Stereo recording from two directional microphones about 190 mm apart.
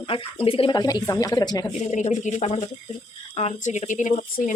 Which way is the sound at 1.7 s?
35° left (ahead or behind).